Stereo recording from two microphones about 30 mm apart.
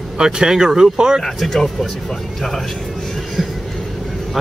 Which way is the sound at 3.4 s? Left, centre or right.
Centre.